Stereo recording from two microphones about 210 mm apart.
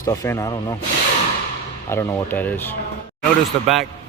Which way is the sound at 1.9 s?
10° left (ahead or behind).